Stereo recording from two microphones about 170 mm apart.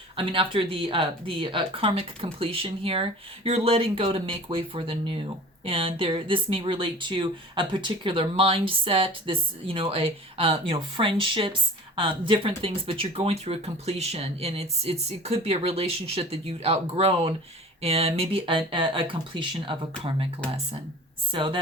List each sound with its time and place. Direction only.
0.2 s speech: 30° right (ahead or behind)
21.3 s a woman's voice: 30° right (ahead or behind)